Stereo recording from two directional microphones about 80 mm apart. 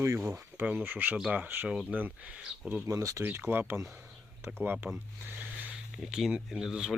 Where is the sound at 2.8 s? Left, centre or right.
Right.